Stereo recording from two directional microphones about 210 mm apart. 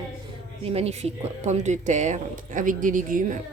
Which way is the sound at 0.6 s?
30° right (ahead or behind).